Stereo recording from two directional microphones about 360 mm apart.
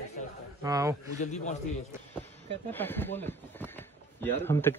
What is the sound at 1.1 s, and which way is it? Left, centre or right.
Speech, centre.